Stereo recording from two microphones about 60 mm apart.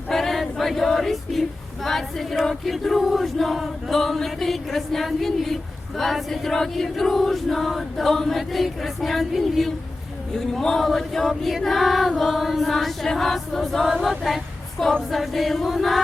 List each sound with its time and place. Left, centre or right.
0.1 s choir: centre